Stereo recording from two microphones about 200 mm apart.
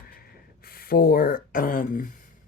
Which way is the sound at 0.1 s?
50° left (ahead or behind).